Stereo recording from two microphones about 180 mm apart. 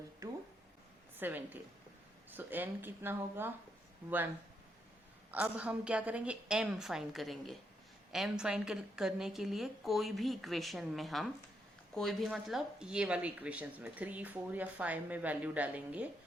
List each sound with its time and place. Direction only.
0.2 s a sound: 20° right (ahead or behind)
1.1 s a woman's voice: 10° right (ahead or behind)
5.3 s a woman's voice: 10° right (ahead or behind)